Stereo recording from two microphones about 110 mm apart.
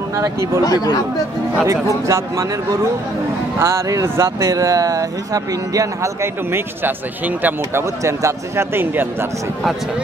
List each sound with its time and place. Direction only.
0.6 s speech: 35° left (ahead or behind)
2.0 s speech: 25° right (ahead or behind)
3.5 s speech: 25° right (ahead or behind)
8.0 s speech: 30° right (ahead or behind)